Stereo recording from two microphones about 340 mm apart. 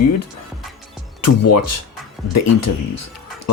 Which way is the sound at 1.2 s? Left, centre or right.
Left.